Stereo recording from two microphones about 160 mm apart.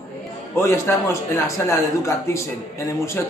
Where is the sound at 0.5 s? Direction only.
15° left (ahead or behind).